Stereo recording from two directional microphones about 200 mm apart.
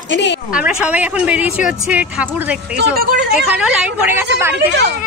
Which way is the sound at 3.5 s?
5° right (ahead or behind).